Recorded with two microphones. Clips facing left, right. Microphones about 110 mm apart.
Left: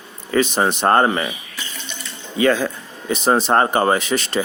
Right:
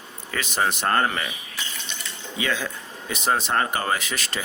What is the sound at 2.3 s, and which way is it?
Speech, 45° left (ahead or behind).